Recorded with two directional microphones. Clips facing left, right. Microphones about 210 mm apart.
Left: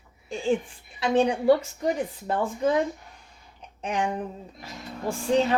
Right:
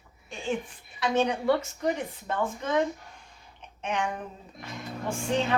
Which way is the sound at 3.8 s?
35° left (ahead or behind).